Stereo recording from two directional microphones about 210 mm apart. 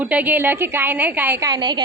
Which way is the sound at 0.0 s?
10° right (ahead or behind).